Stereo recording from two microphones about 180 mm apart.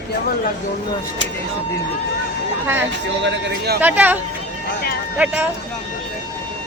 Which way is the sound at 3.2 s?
60° right (ahead or behind).